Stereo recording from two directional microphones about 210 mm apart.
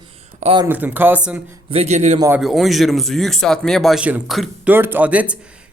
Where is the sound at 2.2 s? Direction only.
10° right (ahead or behind).